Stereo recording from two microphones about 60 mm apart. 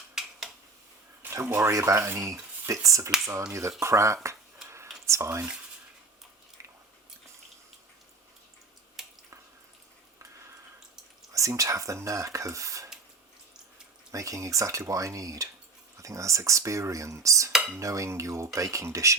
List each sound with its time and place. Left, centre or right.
0.1 s a sound: centre
1.3 s speech: right
6.6 s biting: right
9.0 s drip: centre
11.3 s speech: right
14.1 s speech: right